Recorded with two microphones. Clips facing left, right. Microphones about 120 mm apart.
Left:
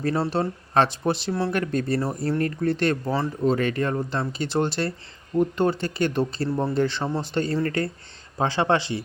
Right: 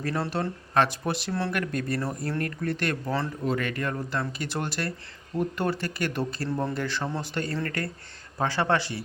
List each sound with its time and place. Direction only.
0.0 s speech: 25° left (ahead or behind)